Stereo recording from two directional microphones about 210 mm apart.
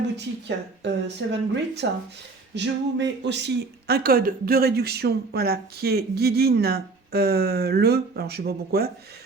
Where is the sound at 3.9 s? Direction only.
45° right (ahead or behind).